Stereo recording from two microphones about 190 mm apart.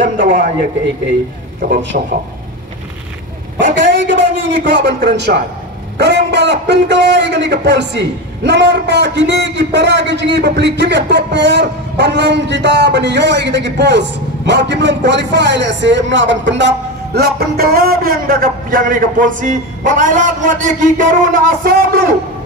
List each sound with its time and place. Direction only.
0.0 s a man's voice: 70° right (ahead or behind)
1.9 s speech: 50° right (ahead or behind)
4.1 s a man's voice: 65° right (ahead or behind); by 22.0 s 50° right (ahead or behind)